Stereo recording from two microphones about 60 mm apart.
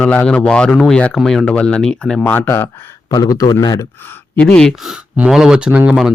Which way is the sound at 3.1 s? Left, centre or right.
Left.